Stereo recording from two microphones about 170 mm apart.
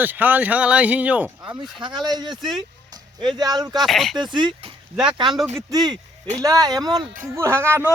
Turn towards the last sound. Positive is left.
turn(degrees=-15)  # may be behind; listen again after turning